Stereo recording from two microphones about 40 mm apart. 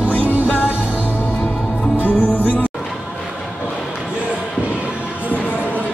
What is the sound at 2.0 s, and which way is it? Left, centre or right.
Music, left.